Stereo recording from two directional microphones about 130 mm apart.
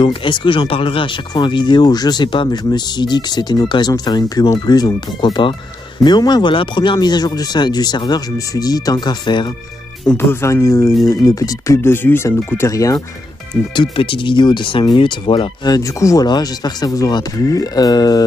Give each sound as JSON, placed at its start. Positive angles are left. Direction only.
{"t": 0.0, "sound": "speech", "side_deg": 40}
{"t": 10.1, "sound": "speech", "side_deg": 20}
{"t": 13.7, "sound": "speech", "side_deg": 40}